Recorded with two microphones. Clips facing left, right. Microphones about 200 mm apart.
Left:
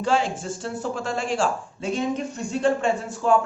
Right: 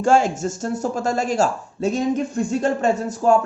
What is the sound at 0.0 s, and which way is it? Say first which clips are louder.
Speech: right 6 dB; 45° right (ahead or behind).